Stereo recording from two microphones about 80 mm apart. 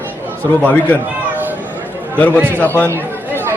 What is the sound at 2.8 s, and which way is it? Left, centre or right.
Chatter, right.